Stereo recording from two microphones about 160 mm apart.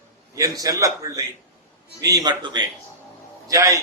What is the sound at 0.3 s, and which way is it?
Speech, 20° right (ahead or behind).